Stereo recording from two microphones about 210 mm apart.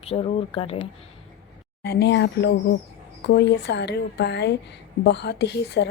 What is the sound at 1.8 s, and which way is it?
A woman's voice, 55° left (ahead or behind).